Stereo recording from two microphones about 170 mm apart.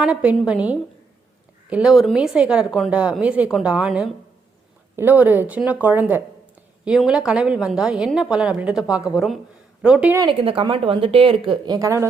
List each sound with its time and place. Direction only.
0.0 s a woman's voice: 5° right (ahead or behind)
10.2 s a woman's voice: 30° right (ahead or behind)